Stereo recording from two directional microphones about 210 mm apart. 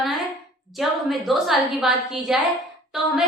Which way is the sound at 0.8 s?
Centre (ahead or behind).